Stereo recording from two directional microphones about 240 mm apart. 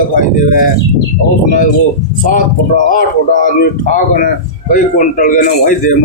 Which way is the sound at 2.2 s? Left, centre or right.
Left.